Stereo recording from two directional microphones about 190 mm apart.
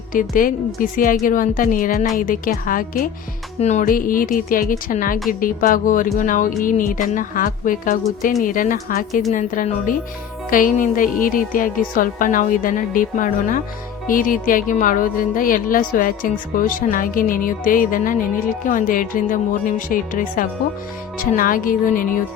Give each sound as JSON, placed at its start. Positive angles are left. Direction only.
{"t": 0.1, "sound": "a woman's voice", "side_deg": 45}